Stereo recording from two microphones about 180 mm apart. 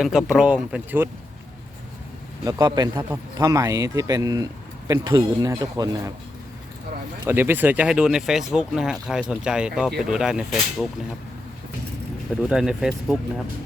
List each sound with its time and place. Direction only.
0.0 s speech: centre (ahead or behind)
2.4 s a man's voice: 20° right (ahead or behind)
7.3 s speech: 10° right (ahead or behind)
12.4 s speech: 5° right (ahead or behind)